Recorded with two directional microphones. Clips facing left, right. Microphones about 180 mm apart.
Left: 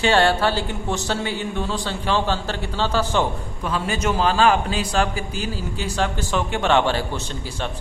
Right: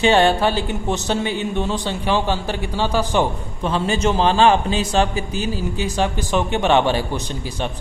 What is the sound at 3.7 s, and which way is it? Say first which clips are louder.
Speech: right 4 dB; 25° right (ahead or behind).